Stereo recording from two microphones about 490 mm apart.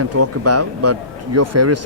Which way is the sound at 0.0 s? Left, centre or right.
Right.